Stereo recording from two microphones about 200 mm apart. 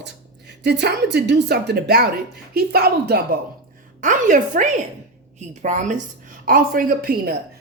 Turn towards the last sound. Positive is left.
turn(degrees=-50)  # may be behind; listen again after turning